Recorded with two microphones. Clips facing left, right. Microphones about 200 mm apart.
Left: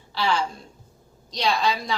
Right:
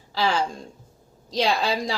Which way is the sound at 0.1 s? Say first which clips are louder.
Right 1 dB; 40° right (ahead or behind).